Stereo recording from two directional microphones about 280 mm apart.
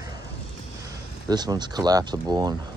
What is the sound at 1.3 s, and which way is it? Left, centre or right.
Speech, centre.